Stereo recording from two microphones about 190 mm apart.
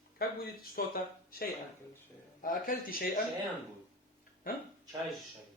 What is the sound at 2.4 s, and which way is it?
Speech, 45° left (ahead or behind).